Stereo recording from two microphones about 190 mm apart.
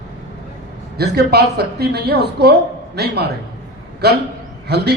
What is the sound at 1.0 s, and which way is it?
A woman's voice, 60° right (ahead or behind).